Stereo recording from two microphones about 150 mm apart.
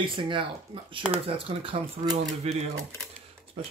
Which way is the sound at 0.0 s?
35° right (ahead or behind).